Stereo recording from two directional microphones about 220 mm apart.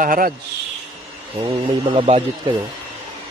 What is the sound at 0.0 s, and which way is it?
Speech, 40° right (ahead or behind).